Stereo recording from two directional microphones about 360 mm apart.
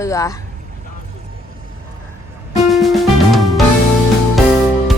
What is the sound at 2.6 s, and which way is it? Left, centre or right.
Music, centre.